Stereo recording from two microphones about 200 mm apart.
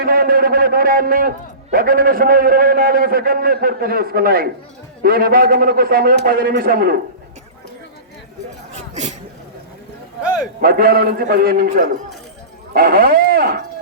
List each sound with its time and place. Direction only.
0.0 s a man's voice: 45° right (ahead or behind)
10.6 s a man's voice: 50° right (ahead or behind)